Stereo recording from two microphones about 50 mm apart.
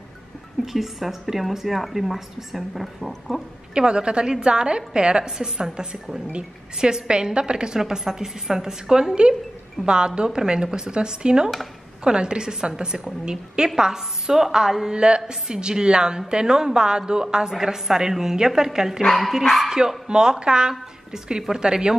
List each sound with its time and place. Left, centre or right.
0.7 s a woman's voice: centre
3.7 s a woman's voice: centre
19.0 s a woman's voice: centre
19.7 s a woman's voice: centre